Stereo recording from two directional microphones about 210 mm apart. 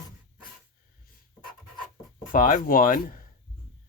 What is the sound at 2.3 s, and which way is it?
Speech, 40° left (ahead or behind).